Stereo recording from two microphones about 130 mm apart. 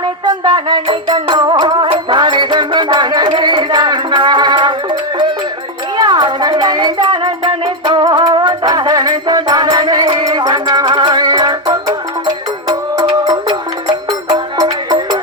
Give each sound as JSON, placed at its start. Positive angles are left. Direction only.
{"t": 0.0, "sound": "music", "side_deg": -35}